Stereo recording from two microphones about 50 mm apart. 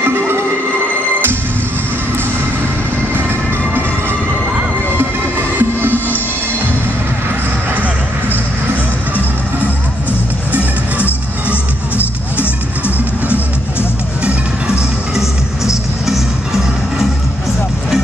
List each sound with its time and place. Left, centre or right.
0.0 s music: right
3.1 s music: right
5.6 s music: right
5.9 s music: left
12.4 s music: left